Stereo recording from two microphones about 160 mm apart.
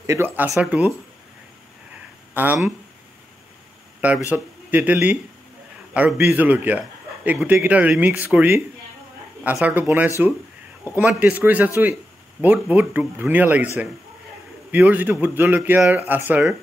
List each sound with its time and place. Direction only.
0.0 s a man's voice: 15° right (ahead or behind)
2.3 s a man's voice: 10° right (ahead or behind)
4.3 s a man's voice: 10° right (ahead or behind)
14.7 s a man's voice: 10° right (ahead or behind)